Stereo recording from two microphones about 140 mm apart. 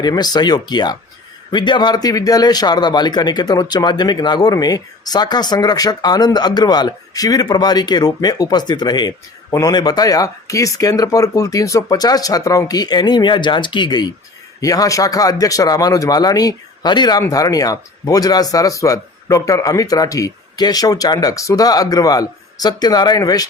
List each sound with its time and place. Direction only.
0.0 s a man's voice: 30° left (ahead or behind)